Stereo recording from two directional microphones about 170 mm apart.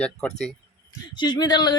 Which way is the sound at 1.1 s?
25° left (ahead or behind).